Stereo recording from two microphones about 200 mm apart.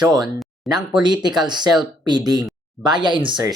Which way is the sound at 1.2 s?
20° right (ahead or behind).